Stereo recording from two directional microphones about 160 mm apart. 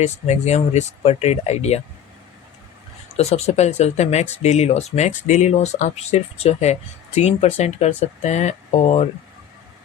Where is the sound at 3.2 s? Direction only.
40° left (ahead or behind).